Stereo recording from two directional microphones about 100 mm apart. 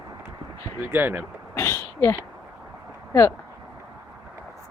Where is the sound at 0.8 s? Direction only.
20° right (ahead or behind).